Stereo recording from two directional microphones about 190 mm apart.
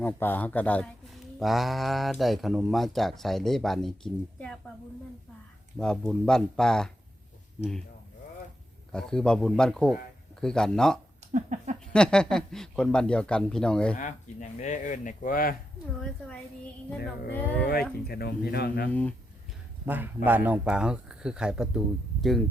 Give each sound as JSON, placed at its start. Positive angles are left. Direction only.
{"t": 0.0, "sound": "speech", "side_deg": 10}
{"t": 5.8, "sound": "speech", "side_deg": 0}
{"t": 8.9, "sound": "speech", "side_deg": 5}
{"t": 11.3, "sound": "a sound", "side_deg": -40}
{"t": 11.9, "sound": "speech", "side_deg": 5}
{"t": 13.9, "sound": "speech", "side_deg": 40}
{"t": 17.3, "sound": "speech", "side_deg": 10}
{"t": 18.0, "sound": "speech", "side_deg": 55}
{"t": 18.9, "sound": "speech", "side_deg": 5}
{"t": 19.8, "sound": "a man's voice", "side_deg": -10}